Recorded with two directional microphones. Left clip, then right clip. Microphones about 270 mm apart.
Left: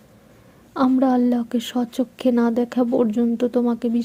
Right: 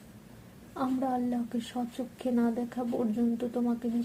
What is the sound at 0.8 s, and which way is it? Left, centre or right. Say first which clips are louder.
A woman's voice: left 12 dB; left.